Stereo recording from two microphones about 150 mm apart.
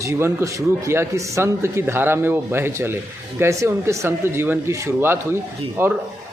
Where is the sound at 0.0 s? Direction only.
15° right (ahead or behind).